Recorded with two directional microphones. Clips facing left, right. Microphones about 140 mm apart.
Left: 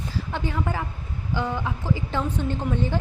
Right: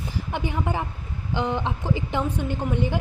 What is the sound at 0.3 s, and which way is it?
A woman's voice, 15° right (ahead or behind).